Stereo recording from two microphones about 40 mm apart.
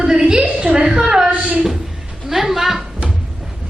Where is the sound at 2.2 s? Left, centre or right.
Centre.